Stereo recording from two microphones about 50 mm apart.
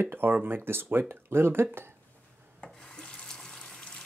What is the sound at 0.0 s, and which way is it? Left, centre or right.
Speech, right.